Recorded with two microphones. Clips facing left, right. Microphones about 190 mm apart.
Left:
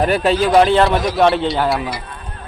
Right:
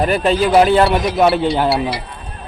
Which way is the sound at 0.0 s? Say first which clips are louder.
Even; centre (ahead or behind).